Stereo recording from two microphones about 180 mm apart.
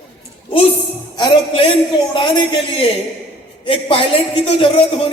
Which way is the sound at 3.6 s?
30° left (ahead or behind).